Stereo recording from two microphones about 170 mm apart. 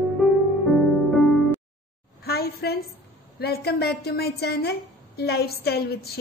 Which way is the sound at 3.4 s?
70° left (ahead or behind).